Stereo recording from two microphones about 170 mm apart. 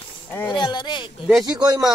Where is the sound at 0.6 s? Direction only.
25° left (ahead or behind).